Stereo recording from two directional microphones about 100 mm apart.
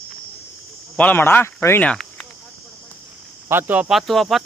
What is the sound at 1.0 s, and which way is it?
Speech, 20° left (ahead or behind).